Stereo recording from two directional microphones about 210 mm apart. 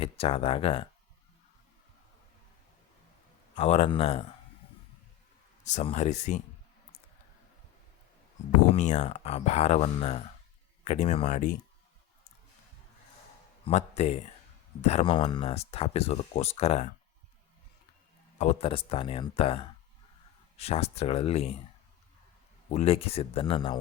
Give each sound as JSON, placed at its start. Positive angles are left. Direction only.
{"t": 0.0, "sound": "speech", "side_deg": 25}
{"t": 3.5, "sound": "speech", "side_deg": 30}
{"t": 5.6, "sound": "speech", "side_deg": 30}
{"t": 8.7, "sound": "speech", "side_deg": 30}
{"t": 13.7, "sound": "speech", "side_deg": 30}
{"t": 18.3, "sound": "speech", "side_deg": 30}
{"t": 22.7, "sound": "speech", "side_deg": 30}